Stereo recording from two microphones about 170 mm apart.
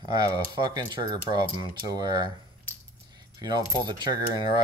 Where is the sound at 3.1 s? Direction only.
25° right (ahead or behind).